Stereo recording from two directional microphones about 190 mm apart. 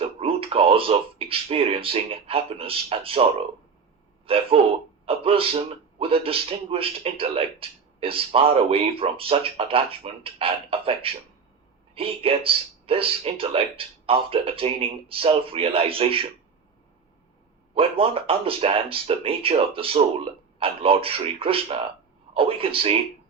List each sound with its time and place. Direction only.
0.0 s speech: 30° right (ahead or behind)
4.3 s a man's voice: 30° right (ahead or behind)
17.7 s a man's voice: 30° right (ahead or behind)